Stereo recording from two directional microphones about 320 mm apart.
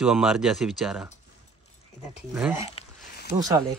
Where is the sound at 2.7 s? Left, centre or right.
Left.